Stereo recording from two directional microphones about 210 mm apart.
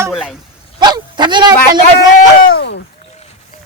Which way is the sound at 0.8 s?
20° right (ahead or behind).